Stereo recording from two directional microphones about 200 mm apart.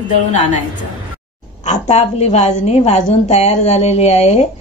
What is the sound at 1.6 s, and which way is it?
Speech, 35° left (ahead or behind).